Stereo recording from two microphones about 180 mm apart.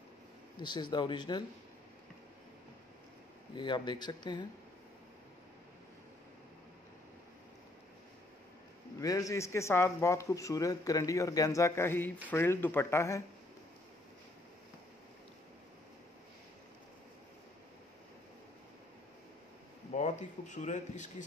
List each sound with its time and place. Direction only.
0.6 s speech: 25° left (ahead or behind)
3.5 s speech: 25° left (ahead or behind)
9.0 s a man's voice: 20° left (ahead or behind)
19.9 s speech: 40° left (ahead or behind)